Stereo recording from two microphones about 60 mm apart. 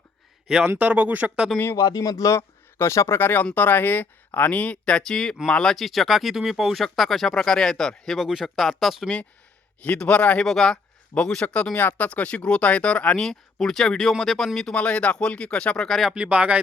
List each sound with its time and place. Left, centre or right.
0.4 s a man's voice: centre
0.8 s speech: right
1.7 s speech: left
2.3 s speech: left
3.2 s speech: left; by 5.7 s centre
5.7 s speech: centre
9.8 s speech: left
10.4 s speech: centre
11.7 s speech: left
13.1 s speech: centre
14.7 s speech: centre
15.9 s speech: centre
16.1 s speech: centre